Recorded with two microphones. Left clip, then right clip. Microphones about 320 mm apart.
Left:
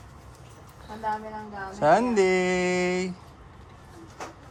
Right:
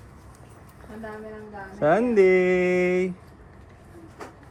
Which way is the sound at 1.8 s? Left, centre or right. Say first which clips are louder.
Right 1 dB; centre.